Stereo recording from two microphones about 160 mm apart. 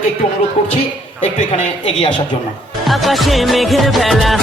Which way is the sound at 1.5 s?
35° left (ahead or behind).